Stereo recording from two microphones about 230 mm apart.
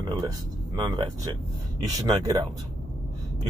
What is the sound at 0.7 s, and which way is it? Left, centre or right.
Speech, centre.